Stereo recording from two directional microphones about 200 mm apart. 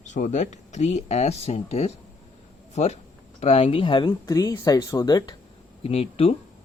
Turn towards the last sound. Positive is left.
turn(degrees=30)  # may be behind; listen again after turning